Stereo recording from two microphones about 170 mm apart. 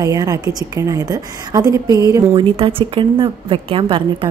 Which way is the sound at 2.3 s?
30° right (ahead or behind).